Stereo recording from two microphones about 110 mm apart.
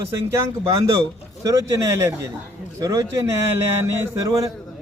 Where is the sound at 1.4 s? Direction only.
30° right (ahead or behind).